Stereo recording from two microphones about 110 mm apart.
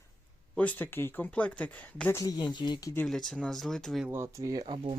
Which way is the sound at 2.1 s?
35° left (ahead or behind).